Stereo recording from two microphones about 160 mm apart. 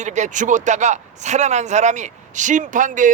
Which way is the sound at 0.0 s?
50° right (ahead or behind).